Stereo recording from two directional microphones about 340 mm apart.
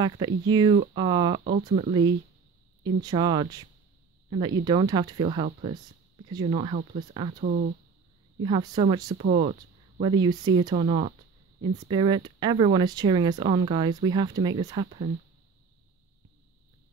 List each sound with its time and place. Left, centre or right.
0.0 s speech: centre